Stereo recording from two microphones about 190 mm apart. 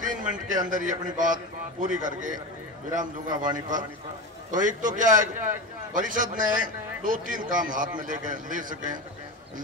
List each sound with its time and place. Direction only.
0.6 s a man's voice: 45° right (ahead or behind)